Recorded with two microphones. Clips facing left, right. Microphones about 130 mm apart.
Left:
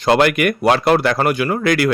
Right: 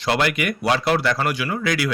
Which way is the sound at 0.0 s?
50° left (ahead or behind).